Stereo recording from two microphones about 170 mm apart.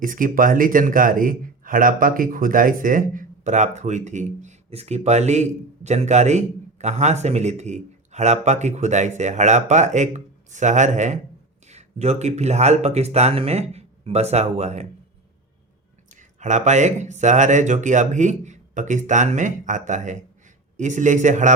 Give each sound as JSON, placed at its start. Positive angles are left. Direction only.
{"t": 0.0, "sound": "a man's voice", "side_deg": -55}
{"t": 16.1, "sound": "a man's voice", "side_deg": -45}